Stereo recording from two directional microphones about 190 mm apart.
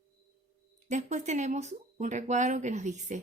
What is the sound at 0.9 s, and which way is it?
Speech, 40° right (ahead or behind).